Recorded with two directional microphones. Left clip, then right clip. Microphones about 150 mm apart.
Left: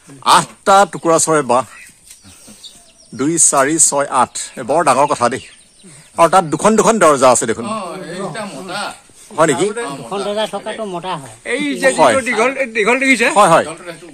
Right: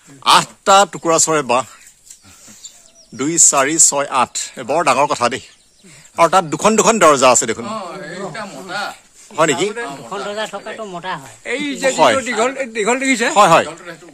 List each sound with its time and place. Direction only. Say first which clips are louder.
0.2 s speech: left 1 dB; 10° right (ahead or behind)
3.2 s speech: left 1 dB; 10° right (ahead or behind)
7.6 s a man's voice: left 2 dB; 20° left (ahead or behind)
8.8 s speech: left 1 dB; 10° right (ahead or behind)
10.3 s speech: left 4 dB; 40° left (ahead or behind)
11.4 s speech: left 3 dB; 35° right (ahead or behind)
11.9 s speech: left 1 dB; 10° right (ahead or behind)
12.2 s a man's voice: left 3 dB; 90° right
13.4 s speech: right 1 dB; 15° right (ahead or behind)